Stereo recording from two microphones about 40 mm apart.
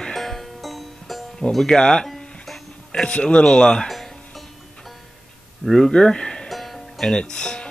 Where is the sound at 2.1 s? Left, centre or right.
Centre.